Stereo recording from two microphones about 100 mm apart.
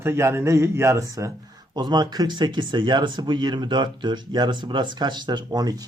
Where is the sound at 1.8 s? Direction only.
45° right (ahead or behind).